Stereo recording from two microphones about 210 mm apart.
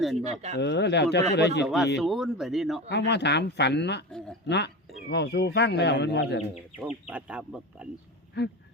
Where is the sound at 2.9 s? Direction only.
55° left (ahead or behind).